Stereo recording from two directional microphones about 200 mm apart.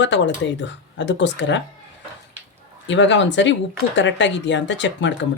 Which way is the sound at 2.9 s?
65° left (ahead or behind).